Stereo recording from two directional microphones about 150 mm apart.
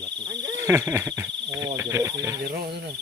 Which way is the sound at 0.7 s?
15° right (ahead or behind).